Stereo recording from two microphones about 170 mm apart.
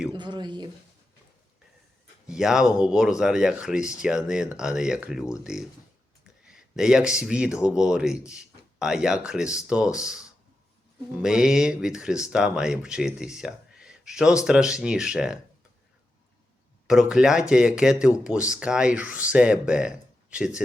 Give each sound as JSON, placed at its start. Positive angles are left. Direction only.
{"t": 0.1, "sound": "speech", "side_deg": -25}
{"t": 2.2, "sound": "speech", "side_deg": -5}
{"t": 16.8, "sound": "speech", "side_deg": -5}